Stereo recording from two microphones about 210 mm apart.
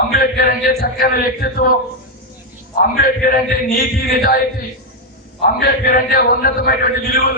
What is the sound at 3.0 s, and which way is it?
A man's voice, 45° left (ahead or behind).